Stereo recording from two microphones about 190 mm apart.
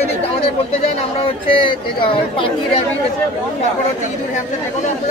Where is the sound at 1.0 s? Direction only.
25° left (ahead or behind).